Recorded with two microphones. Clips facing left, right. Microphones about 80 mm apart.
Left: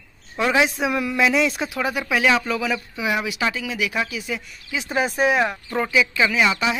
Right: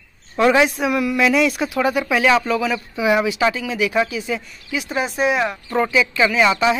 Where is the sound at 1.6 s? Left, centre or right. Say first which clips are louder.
Right 5 dB; centre.